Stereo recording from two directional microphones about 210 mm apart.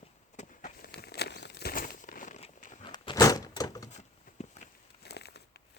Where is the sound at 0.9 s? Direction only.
50° left (ahead or behind).